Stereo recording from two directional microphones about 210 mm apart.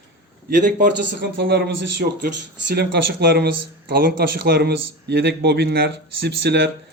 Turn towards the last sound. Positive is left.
turn(degrees=-50)  # may be behind; listen again after turning